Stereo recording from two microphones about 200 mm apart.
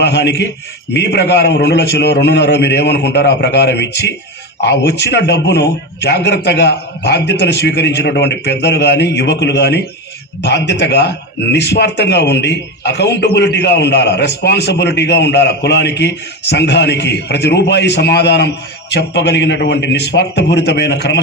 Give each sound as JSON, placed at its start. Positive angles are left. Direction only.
{"t": 0.0, "sound": "a man's voice", "side_deg": 55}